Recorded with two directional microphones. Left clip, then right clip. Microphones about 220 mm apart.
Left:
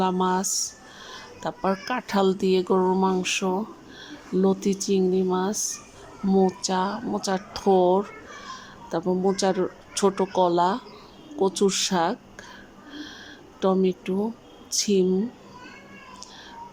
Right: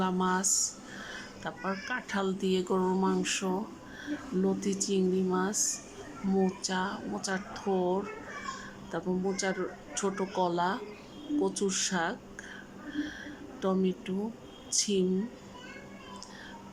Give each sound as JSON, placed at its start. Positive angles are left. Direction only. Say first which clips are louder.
{"t": 0.0, "sound": "speech", "louder": "left 6 dB", "side_deg": 15}
{"t": 12.9, "sound": "a sound", "louder": "right 2 dB", "side_deg": 15}
{"t": 13.6, "sound": "speech", "louder": "left 8 dB", "side_deg": 15}